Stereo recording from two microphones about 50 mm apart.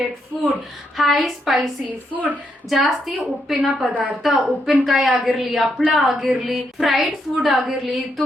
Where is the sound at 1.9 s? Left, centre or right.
Right.